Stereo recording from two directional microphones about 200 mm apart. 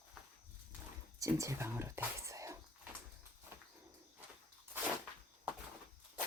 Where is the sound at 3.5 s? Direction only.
10° right (ahead or behind).